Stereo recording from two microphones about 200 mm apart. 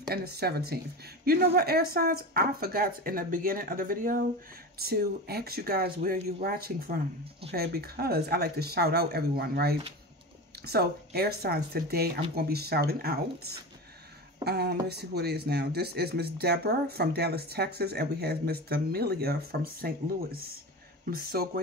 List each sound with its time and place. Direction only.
0.0 s speech: 50° right (ahead or behind)